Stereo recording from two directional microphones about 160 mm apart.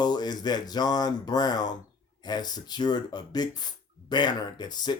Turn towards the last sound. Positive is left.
turn(degrees=25)  # may be behind; listen again after turning